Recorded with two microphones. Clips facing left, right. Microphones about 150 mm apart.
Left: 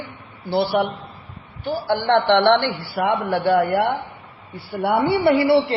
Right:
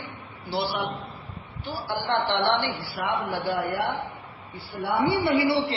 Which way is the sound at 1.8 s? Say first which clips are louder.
Left 9 dB; 65° left (ahead or behind).